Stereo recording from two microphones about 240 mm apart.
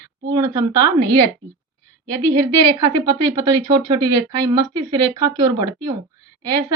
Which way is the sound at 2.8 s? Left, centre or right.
Right.